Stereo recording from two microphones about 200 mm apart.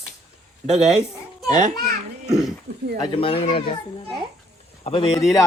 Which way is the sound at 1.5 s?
35° right (ahead or behind).